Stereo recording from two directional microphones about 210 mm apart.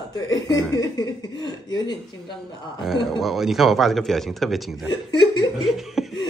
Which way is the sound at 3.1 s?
Centre (ahead or behind).